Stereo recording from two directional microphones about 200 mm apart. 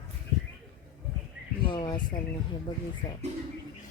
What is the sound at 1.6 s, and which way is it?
Speech, 25° left (ahead or behind).